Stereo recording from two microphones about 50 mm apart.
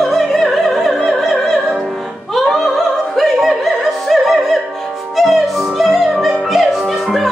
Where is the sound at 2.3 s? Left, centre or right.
Centre.